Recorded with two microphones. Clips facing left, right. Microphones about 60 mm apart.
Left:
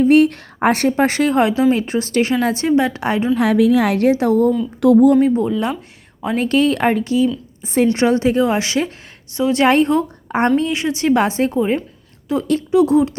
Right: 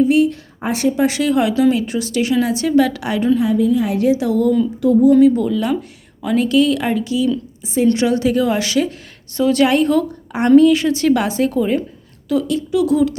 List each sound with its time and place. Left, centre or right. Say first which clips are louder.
0.0 s a woman's voice: left 2 dB; left
3.3 s a woman's voice: left 4 dB; left
3.9 s a woman's voice: left 1 dB; left
4.8 s speech: left 3 dB; left
5.3 s a woman's voice: even; left
7.6 s a woman's voice: left 3 dB; left
7.9 s a woman's voice: left 1 dB; left